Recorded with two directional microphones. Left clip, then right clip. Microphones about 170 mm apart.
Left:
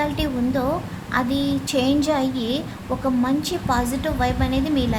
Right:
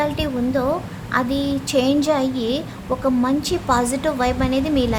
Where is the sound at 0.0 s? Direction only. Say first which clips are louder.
Right 2 dB; 15° right (ahead or behind).